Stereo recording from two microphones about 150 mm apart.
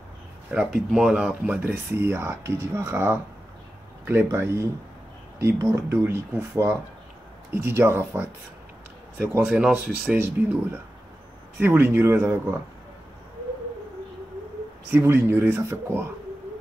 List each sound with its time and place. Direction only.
0.5 s speech: 5° right (ahead or behind)
9.5 s speech: 5° right (ahead or behind)
11.6 s speech: 15° right (ahead or behind)
14.9 s speech: 15° right (ahead or behind)